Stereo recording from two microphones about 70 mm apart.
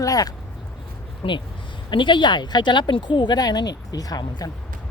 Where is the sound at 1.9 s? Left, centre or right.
Left.